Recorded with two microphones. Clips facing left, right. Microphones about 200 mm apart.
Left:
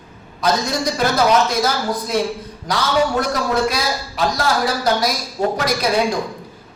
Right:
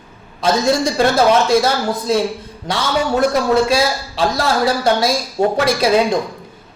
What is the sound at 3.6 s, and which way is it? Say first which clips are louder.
Speech: right 5 dB; 30° right (ahead or behind).